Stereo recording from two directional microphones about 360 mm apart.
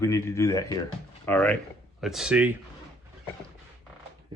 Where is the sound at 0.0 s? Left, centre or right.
Centre.